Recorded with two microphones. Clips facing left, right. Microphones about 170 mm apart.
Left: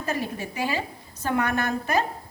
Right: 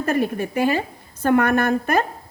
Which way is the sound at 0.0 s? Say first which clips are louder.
Right 8 dB; 60° right (ahead or behind).